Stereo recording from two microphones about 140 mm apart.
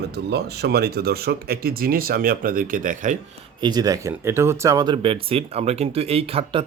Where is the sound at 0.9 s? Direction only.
90° right.